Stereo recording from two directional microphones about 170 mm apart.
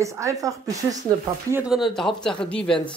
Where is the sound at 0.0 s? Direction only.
20° right (ahead or behind).